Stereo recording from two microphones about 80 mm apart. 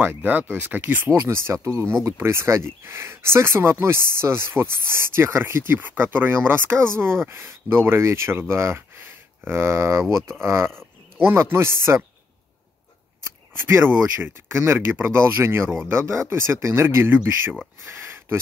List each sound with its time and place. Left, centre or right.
0.0 s speech: right
13.6 s speech: right